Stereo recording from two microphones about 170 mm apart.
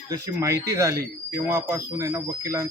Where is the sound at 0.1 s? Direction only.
20° right (ahead or behind).